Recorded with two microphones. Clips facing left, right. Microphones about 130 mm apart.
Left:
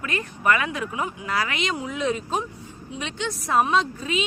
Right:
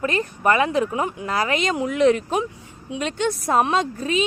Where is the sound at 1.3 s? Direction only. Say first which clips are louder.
Right 4 dB; 40° right (ahead or behind).